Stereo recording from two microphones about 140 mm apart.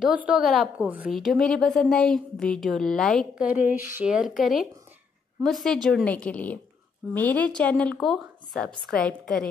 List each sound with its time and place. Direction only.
0.0 s a woman's voice: 5° right (ahead or behind)
3.4 s a woman's voice: 10° right (ahead or behind)
4.1 s a woman's voice: centre (ahead or behind)